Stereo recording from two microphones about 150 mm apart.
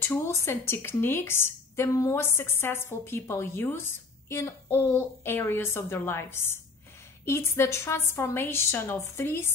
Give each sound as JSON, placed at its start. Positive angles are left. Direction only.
{"t": 0.0, "sound": "speech", "side_deg": 15}